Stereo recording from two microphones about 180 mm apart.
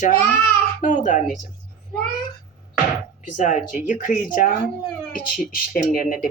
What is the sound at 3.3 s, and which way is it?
A woman's voice, 45° left (ahead or behind).